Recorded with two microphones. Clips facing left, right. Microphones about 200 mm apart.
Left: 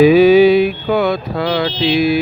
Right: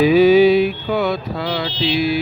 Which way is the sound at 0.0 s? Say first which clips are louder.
Left 3 dB; 65° left (ahead or behind).